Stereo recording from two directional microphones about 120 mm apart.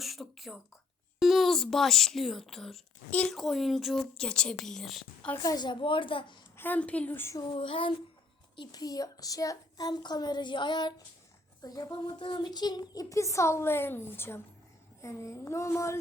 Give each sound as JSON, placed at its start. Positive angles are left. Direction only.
{"t": 0.0, "sound": "a sound", "side_deg": 0}
{"t": 1.2, "sound": "a woman's voice", "side_deg": 0}
{"t": 5.4, "sound": "a child's voice", "side_deg": 35}
{"t": 6.6, "sound": "a woman's voice", "side_deg": 15}
{"t": 7.5, "sound": "child singing", "side_deg": 50}
{"t": 8.5, "sound": "a child's voice", "side_deg": 30}